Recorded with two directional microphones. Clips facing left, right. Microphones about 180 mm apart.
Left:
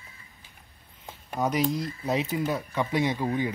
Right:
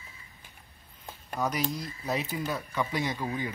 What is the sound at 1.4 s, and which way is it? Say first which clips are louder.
Speech: left 5 dB; 25° left (ahead or behind).